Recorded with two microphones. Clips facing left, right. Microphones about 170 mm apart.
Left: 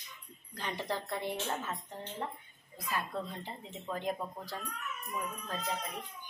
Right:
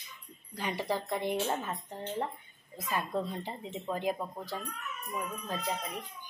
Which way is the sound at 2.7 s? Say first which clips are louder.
Right 3 dB; 25° right (ahead or behind).